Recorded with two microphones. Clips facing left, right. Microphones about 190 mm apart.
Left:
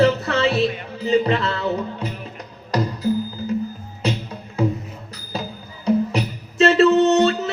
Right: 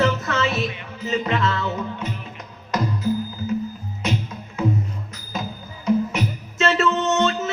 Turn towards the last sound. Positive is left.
turn(degrees=35)  # may be behind; listen again after turning